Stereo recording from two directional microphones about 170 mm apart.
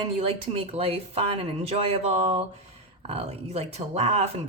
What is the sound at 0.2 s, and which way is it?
Speech, 35° right (ahead or behind).